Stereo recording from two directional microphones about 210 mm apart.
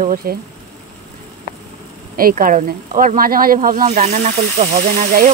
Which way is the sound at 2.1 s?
45° right (ahead or behind).